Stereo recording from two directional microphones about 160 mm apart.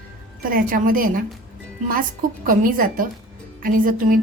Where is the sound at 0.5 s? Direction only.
60° right (ahead or behind).